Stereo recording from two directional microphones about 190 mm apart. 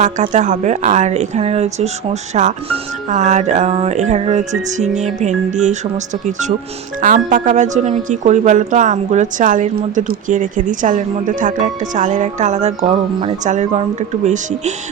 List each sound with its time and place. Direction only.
0.0 s speech: 40° right (ahead or behind)
7.0 s speech: 40° right (ahead or behind)